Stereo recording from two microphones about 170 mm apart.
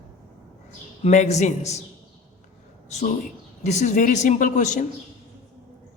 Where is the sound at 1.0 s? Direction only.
40° left (ahead or behind).